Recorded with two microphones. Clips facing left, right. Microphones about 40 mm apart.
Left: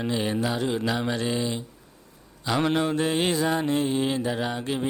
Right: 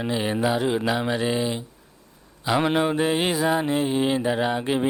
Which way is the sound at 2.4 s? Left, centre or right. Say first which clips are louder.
Right 3 dB; centre.